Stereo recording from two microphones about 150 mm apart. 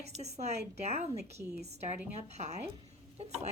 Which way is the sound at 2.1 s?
50° right (ahead or behind).